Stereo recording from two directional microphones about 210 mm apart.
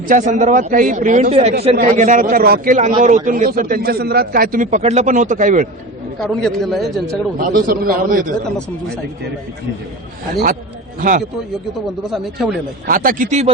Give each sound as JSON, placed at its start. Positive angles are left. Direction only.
{"t": 0.1, "sound": "a man's voice", "side_deg": -35}
{"t": 6.1, "sound": "a man's voice", "side_deg": 0}
{"t": 7.3, "sound": "a man's voice", "side_deg": -45}
{"t": 10.3, "sound": "a man's voice", "side_deg": -40}
{"t": 12.1, "sound": "a man's voice", "side_deg": 0}
{"t": 12.9, "sound": "a man's voice", "side_deg": -40}